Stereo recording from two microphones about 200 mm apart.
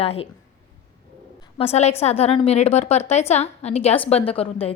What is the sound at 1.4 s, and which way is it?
A woman's voice, 30° left (ahead or behind).